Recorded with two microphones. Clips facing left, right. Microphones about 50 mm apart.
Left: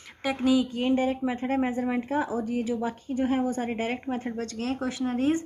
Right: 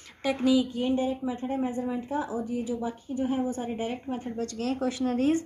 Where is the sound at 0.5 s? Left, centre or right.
Left.